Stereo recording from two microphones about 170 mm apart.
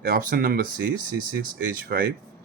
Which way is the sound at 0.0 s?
55° right (ahead or behind).